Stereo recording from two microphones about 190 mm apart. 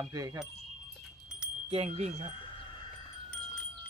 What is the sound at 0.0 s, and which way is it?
Speech, 15° right (ahead or behind).